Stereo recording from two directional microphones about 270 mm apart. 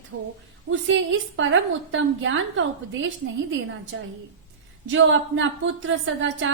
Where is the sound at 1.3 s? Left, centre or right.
Right.